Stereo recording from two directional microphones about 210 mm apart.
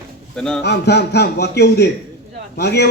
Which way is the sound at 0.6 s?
50° left (ahead or behind).